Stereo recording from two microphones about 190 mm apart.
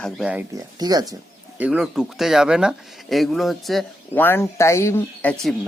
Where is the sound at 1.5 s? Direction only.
10° right (ahead or behind).